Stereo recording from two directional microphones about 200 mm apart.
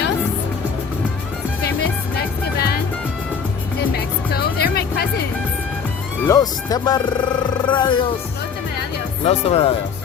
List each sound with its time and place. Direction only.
2.6 s music: 50° left (ahead or behind)
4.6 s music: 50° left (ahead or behind)
6.2 s music: 15° left (ahead or behind)
9.2 s speech: 30° left (ahead or behind)